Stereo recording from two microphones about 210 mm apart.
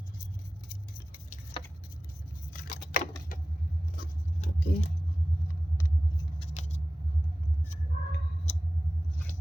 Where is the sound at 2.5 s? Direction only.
40° left (ahead or behind).